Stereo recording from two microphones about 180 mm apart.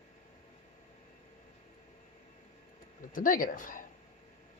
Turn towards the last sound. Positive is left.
turn(degrees=50)  # may be behind; listen again after turning